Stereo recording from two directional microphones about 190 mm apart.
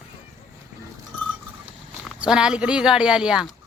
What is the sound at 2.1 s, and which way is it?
Speech, 5° right (ahead or behind).